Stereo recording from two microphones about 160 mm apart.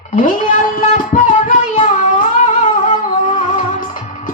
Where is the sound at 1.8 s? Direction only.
55° left (ahead or behind).